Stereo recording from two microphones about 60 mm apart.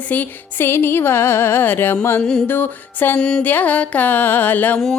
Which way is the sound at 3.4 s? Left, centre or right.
Left.